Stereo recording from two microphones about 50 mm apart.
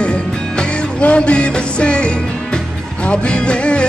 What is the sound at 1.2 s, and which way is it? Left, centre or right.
Music, centre.